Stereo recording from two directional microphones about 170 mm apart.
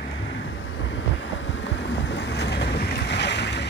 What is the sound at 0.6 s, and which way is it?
Vehicle, 90° left.